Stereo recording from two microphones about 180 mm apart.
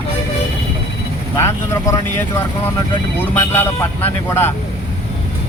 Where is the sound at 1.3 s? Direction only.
15° left (ahead or behind).